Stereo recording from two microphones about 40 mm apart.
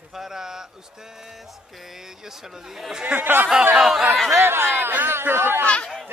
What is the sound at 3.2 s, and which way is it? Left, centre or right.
Speech, right.